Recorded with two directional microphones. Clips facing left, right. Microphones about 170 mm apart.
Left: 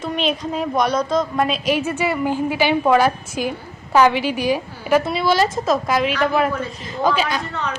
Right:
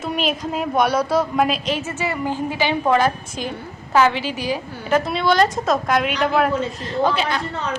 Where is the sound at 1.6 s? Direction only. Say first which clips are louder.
Left 4 dB; 15° left (ahead or behind).